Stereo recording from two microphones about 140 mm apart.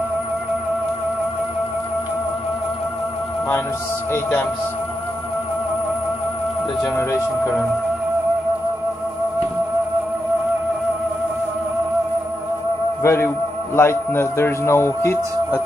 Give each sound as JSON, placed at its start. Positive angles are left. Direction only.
{"t": 4.1, "sound": "a man's voice", "side_deg": 15}
{"t": 7.0, "sound": "speech", "side_deg": 20}
{"t": 13.0, "sound": "a man's voice", "side_deg": 20}